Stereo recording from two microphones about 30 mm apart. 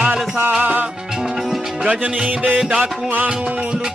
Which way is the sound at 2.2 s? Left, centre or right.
Right.